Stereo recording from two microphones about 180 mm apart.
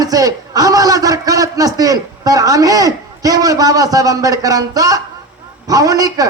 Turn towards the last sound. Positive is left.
turn(degrees=-20)  # may be behind; listen again after turning